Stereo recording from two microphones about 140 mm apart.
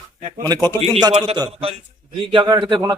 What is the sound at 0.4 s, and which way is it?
Speech, 30° right (ahead or behind).